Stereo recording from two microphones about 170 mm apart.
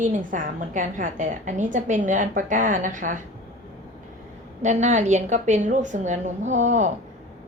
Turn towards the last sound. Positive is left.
turn(degrees=-45)  # may be behind; listen again after turning